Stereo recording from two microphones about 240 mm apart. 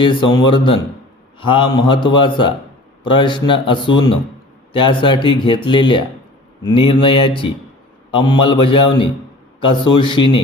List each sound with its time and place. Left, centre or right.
0.0 s speech: centre